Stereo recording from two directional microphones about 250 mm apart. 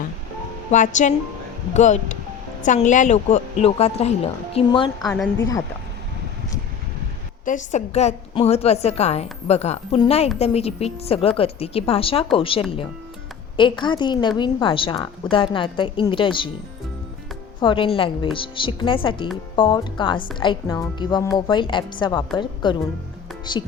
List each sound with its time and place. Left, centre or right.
0.7 s a woman's voice: left
5.0 s speech: centre
5.4 s a woman's voice: centre
7.4 s a woman's voice: left
17.6 s a woman's voice: centre